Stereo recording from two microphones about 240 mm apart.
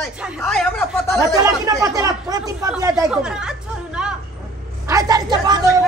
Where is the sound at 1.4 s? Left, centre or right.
Centre.